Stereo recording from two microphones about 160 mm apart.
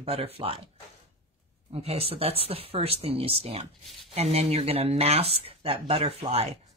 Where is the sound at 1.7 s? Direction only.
40° right (ahead or behind).